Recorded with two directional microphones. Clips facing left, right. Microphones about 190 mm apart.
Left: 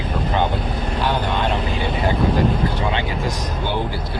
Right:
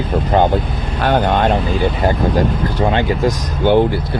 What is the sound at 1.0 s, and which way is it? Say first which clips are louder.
Speech: right 8 dB; 60° right (ahead or behind).